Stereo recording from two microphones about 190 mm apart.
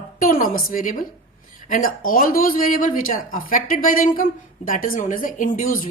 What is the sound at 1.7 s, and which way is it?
Speech, 45° left (ahead or behind).